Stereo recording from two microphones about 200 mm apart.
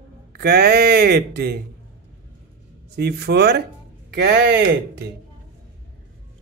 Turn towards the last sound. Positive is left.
turn(degrees=-55)  # may be behind; listen again after turning